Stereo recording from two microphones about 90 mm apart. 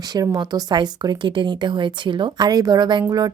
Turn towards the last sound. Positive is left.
turn(degrees=-45)  # may be behind; listen again after turning